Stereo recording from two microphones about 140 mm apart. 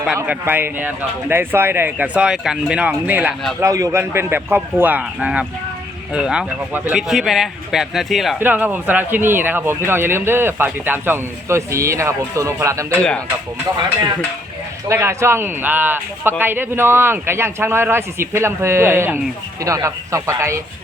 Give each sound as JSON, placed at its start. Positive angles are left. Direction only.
{"t": 0.3, "sound": "speech", "side_deg": -15}
{"t": 3.6, "sound": "speech", "side_deg": -20}
{"t": 8.4, "sound": "speech", "side_deg": -15}
{"t": 14.8, "sound": "speech", "side_deg": -20}